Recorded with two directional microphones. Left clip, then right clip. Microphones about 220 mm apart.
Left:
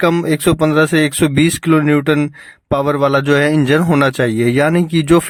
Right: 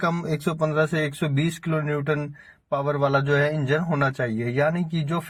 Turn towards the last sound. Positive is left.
turn(degrees=45)  # may be behind; listen again after turning